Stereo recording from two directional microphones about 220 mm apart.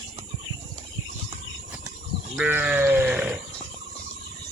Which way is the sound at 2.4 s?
5° right (ahead or behind).